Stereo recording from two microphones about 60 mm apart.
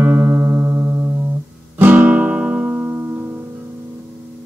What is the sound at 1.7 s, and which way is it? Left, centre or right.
Music, right.